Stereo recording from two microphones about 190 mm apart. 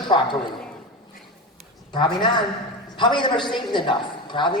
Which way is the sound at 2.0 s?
25° left (ahead or behind).